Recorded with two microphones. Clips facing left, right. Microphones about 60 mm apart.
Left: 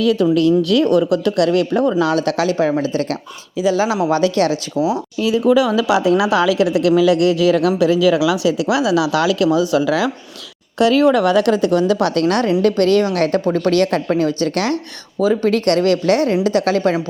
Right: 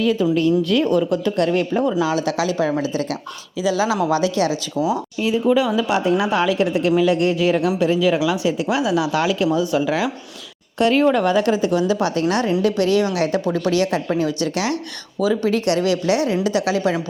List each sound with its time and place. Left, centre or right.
0.0 s a woman's voice: left
2.0 s speech: left
4.1 s speech: left
5.3 s a woman's voice: left